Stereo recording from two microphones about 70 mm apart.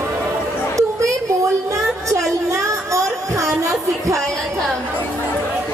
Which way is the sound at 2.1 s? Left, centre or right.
Right.